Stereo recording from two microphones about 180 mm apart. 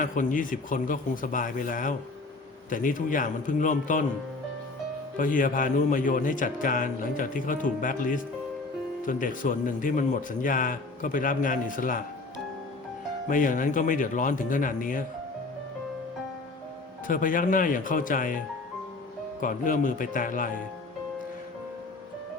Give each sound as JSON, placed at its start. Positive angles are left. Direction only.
{"t": 0.0, "sound": "a man's voice", "side_deg": 45}
{"t": 5.1, "sound": "a man's voice", "side_deg": 50}
{"t": 13.2, "sound": "a man's voice", "side_deg": 50}
{"t": 17.1, "sound": "a man's voice", "side_deg": 50}